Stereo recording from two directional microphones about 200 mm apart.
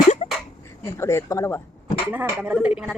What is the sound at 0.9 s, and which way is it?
Speech, 15° left (ahead or behind).